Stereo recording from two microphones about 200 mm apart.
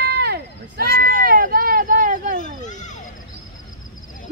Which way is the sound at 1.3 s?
45° right (ahead or behind).